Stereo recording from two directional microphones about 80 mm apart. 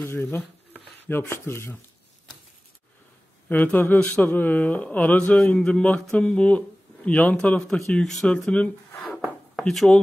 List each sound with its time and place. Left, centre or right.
0.0 s a sound: left
1.2 s speech: left
3.4 s speech: left; by 9.9 s centre